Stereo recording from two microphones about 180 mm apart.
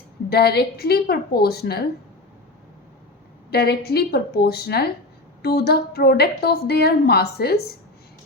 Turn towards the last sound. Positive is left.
turn(degrees=60)  # may be behind; listen again after turning